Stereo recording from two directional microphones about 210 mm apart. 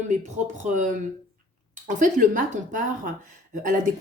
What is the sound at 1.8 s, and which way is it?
Speech, 40° right (ahead or behind).